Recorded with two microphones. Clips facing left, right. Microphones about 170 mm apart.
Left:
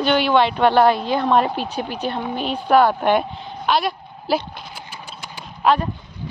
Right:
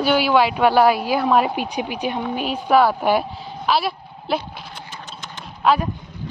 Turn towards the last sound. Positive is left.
turn(degrees=0)  # may be behind; listen again after turning